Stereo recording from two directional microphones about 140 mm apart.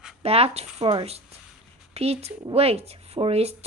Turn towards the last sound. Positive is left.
turn(degrees=-45)  # may be behind; listen again after turning